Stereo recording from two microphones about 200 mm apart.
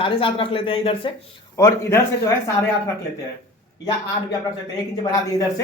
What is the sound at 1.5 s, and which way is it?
Speech, 15° left (ahead or behind).